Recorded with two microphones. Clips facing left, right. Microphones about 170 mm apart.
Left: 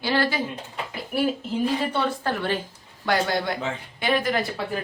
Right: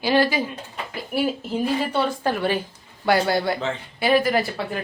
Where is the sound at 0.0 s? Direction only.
15° right (ahead or behind).